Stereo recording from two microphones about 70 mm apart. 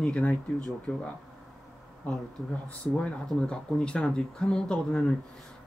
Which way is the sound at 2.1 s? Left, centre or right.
Centre.